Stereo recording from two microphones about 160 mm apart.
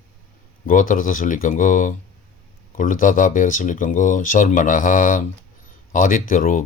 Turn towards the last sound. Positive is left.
turn(degrees=55)  # may be behind; listen again after turning